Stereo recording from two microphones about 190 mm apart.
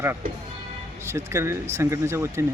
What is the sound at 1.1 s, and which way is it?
Speech, 15° right (ahead or behind).